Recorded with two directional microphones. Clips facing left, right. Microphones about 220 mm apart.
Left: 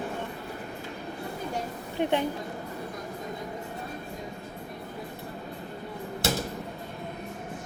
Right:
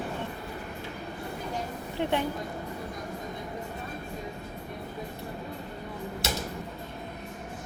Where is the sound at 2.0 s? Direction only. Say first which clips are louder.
Left 2 dB; 20° left (ahead or behind).